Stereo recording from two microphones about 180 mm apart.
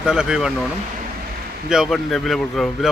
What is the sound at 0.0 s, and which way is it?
Speech, 5° right (ahead or behind).